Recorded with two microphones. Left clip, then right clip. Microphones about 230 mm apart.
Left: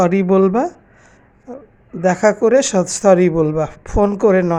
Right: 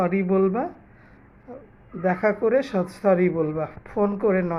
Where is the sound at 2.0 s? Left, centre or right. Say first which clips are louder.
Left 8 dB; left.